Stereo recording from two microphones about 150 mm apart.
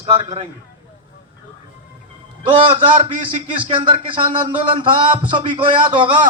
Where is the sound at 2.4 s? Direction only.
35° right (ahead or behind).